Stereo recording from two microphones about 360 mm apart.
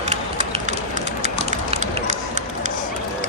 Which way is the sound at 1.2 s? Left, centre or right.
Centre.